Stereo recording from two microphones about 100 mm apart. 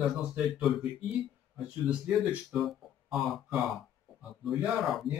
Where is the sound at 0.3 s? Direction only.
Centre (ahead or behind).